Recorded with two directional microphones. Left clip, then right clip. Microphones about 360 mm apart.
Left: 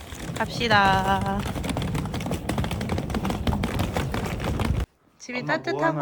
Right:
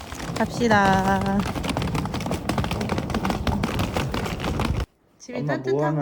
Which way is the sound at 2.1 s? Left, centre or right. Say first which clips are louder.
Right 3 dB; centre.